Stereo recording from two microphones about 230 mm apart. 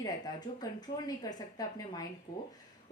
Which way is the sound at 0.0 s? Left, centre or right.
Centre.